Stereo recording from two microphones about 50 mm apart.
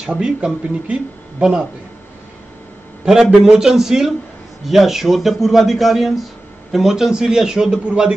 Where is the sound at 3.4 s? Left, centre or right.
Centre.